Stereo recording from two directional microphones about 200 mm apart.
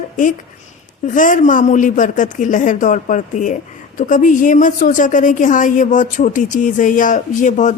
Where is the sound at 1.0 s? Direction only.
40° left (ahead or behind).